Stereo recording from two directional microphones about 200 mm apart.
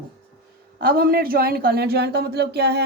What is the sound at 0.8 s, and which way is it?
A woman's voice, 50° right (ahead or behind).